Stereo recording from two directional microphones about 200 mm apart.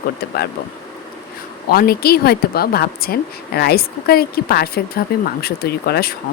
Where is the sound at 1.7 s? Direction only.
50° left (ahead or behind).